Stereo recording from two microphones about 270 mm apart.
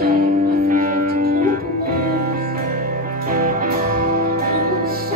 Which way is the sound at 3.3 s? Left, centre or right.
Right.